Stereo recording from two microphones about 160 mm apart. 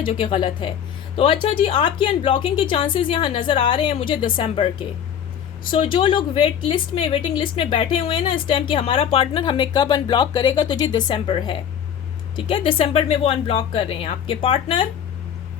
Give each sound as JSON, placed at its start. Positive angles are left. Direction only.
{"t": 0.0, "sound": "a woman's voice", "side_deg": 35}